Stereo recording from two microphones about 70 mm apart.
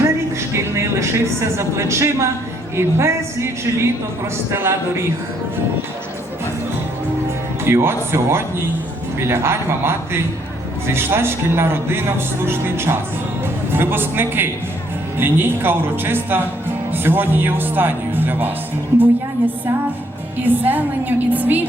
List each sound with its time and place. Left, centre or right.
0.0 s speech: right
7.6 s speech: right
20.4 s speech: right